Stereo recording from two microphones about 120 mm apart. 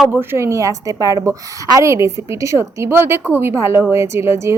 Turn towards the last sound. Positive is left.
turn(degrees=-25)  # may be behind; listen again after turning